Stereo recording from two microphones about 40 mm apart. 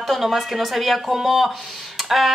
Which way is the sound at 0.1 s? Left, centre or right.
Centre.